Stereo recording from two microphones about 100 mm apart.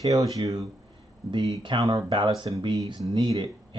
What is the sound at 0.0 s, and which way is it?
Speech, 35° right (ahead or behind).